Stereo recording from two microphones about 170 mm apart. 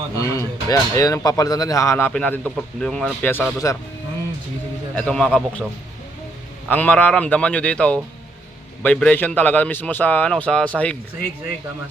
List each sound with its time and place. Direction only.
0.2 s speech: 20° left (ahead or behind)
4.9 s a man's voice: 5° left (ahead or behind)
6.7 s speech: 10° left (ahead or behind)